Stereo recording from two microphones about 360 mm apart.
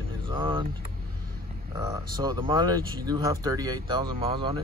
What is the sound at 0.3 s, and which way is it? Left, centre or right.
Vehicle, centre.